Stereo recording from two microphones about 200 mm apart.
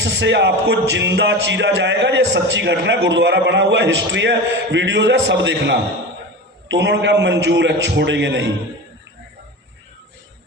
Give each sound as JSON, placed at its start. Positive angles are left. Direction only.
{"t": 0.0, "sound": "music", "side_deg": -60}